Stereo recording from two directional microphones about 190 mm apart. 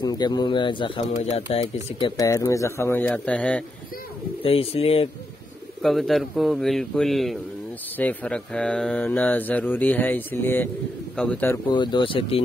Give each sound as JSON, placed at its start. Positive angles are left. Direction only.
{"t": 0.0, "sound": "speech", "side_deg": 20}
{"t": 4.4, "sound": "speech", "side_deg": 30}
{"t": 5.8, "sound": "a man's voice", "side_deg": 0}
{"t": 11.7, "sound": "speech", "side_deg": 25}